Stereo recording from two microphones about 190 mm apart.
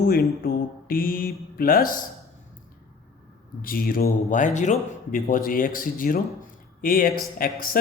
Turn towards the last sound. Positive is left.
turn(degrees=50)  # may be behind; listen again after turning